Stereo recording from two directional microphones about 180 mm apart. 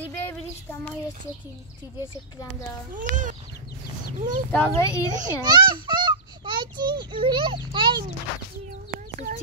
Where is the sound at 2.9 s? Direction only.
45° right (ahead or behind).